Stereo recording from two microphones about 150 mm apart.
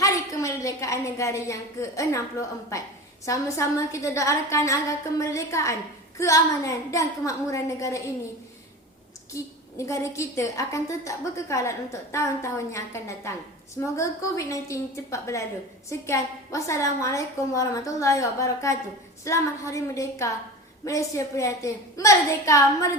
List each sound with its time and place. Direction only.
0.0 s a woman's voice: 20° left (ahead or behind)
9.3 s a woman's voice: 20° left (ahead or behind)